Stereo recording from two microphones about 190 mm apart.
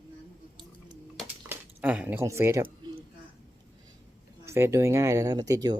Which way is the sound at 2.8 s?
20° right (ahead or behind).